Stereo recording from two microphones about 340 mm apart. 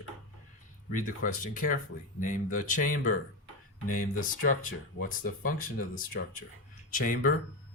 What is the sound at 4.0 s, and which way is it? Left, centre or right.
Speech, left.